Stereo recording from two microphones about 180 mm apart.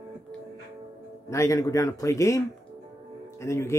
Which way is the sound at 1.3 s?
15° left (ahead or behind).